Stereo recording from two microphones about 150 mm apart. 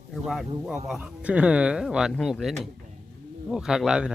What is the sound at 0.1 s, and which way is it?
Speech, centre (ahead or behind).